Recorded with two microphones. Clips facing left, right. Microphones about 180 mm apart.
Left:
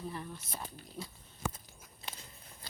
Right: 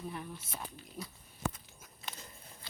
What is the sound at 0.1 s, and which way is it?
Speech, 5° right (ahead or behind).